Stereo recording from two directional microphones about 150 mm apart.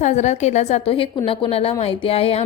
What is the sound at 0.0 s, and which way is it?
A woman's voice, 50° left (ahead or behind).